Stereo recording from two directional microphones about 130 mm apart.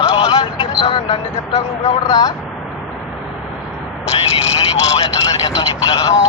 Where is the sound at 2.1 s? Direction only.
30° left (ahead or behind).